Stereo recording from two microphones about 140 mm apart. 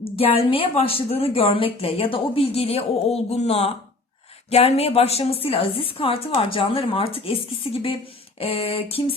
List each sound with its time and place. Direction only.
0.0 s a woman's voice: 40° left (ahead or behind)